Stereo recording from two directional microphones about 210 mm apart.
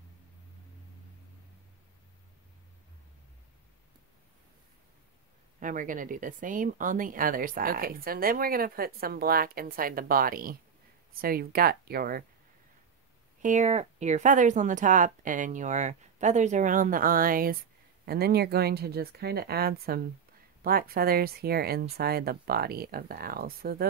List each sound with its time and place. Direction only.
5.6 s speech: 40° right (ahead or behind)
13.4 s speech: 35° right (ahead or behind)